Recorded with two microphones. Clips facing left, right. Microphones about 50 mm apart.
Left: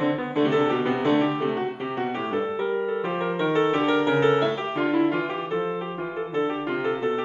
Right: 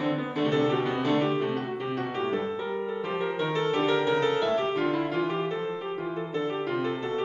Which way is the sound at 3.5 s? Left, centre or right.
Left.